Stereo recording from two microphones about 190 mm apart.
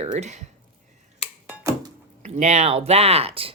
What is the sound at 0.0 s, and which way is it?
Speech, 35° right (ahead or behind).